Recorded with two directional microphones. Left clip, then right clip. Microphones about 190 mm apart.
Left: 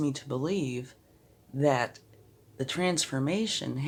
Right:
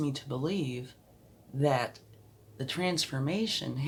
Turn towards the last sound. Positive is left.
turn(degrees=40)  # may be behind; listen again after turning